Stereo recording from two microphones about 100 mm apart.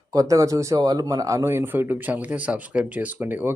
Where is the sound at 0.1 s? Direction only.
35° right (ahead or behind).